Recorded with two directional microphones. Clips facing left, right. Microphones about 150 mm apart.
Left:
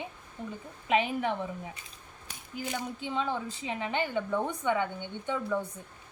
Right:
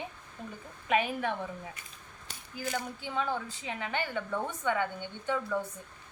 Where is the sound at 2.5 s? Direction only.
20° left (ahead or behind).